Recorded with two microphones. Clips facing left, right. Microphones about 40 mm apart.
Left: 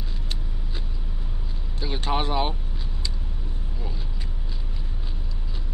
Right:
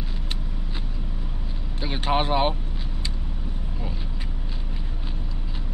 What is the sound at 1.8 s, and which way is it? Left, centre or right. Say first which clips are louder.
Speech: right 3 dB; right.